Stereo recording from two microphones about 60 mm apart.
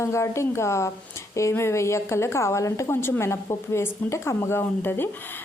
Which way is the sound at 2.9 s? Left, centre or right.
Left.